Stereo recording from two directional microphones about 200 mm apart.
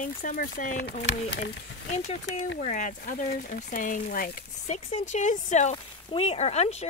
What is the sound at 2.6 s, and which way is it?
Speech, 40° left (ahead or behind).